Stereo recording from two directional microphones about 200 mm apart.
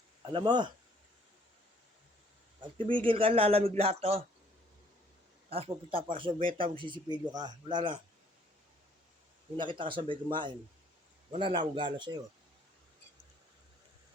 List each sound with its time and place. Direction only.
0.3 s speech: 20° right (ahead or behind)
2.6 s speech: 25° right (ahead or behind)
5.5 s speech: 30° right (ahead or behind)
9.6 s speech: 25° right (ahead or behind)